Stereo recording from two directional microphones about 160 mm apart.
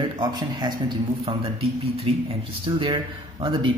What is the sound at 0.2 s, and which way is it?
A man's voice, 25° right (ahead or behind).